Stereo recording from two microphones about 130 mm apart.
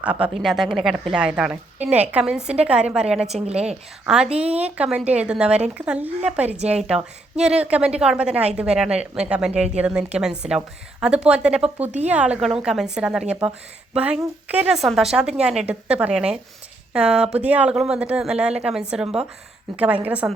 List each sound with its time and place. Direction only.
0.0 s a woman's voice: 10° right (ahead or behind)
3.4 s a woman's voice: 55° right (ahead or behind)
4.0 s a woman's voice: 5° right (ahead or behind)
14.8 s a woman's voice: centre (ahead or behind)